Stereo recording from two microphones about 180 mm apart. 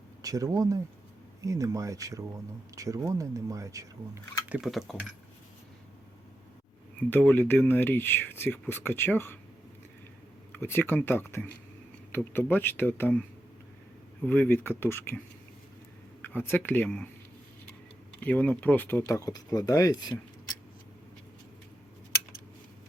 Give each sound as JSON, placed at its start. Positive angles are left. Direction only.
{"t": 0.2, "sound": "speech", "side_deg": -20}
{"t": 4.4, "sound": "speech", "side_deg": -5}
{"t": 7.0, "sound": "speech", "side_deg": 10}
{"t": 10.5, "sound": "speech", "side_deg": 10}
{"t": 14.3, "sound": "speech", "side_deg": 10}
{"t": 16.2, "sound": "speech", "side_deg": 10}
{"t": 18.2, "sound": "speech", "side_deg": 10}